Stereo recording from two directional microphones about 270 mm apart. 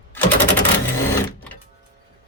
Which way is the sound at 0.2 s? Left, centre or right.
Centre.